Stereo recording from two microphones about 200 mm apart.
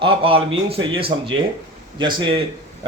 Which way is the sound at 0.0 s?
25° right (ahead or behind).